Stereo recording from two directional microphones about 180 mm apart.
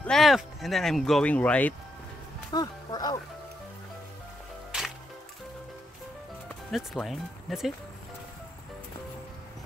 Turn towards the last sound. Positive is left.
turn(degrees=0)  # may be behind; listen again after turning